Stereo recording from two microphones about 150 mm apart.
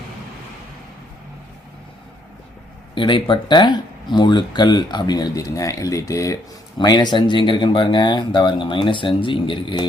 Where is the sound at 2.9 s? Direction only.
35° left (ahead or behind).